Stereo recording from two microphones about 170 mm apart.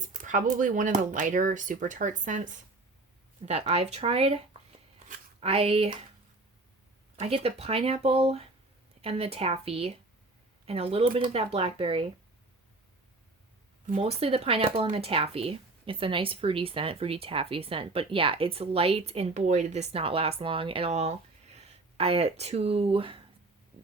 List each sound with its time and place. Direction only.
0.1 s speech: 50° right (ahead or behind)
7.2 s speech: 35° right (ahead or behind)
13.8 s speech: 35° right (ahead or behind)
23.7 s a sound: 25° right (ahead or behind)